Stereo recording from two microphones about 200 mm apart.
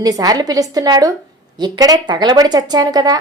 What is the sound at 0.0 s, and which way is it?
A woman's voice, 20° right (ahead or behind).